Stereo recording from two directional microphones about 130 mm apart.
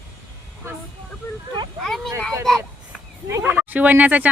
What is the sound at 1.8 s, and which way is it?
Speech, 5° left (ahead or behind).